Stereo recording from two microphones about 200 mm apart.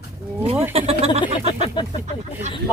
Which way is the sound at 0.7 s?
30° right (ahead or behind).